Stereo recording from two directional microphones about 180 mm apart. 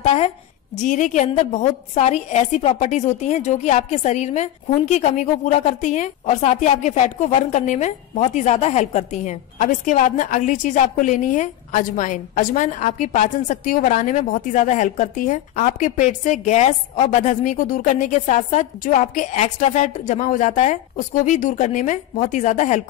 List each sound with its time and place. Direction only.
0.0 s a woman's voice: 35° left (ahead or behind)